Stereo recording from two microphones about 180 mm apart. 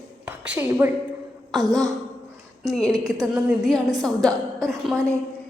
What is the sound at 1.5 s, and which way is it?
A woman's voice, centre (ahead or behind).